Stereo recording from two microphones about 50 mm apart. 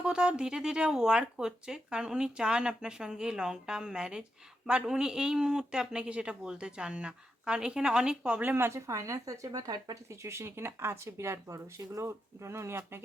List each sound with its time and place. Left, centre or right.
0.0 s speech: centre
8.7 s speech: right
9.9 s speech: right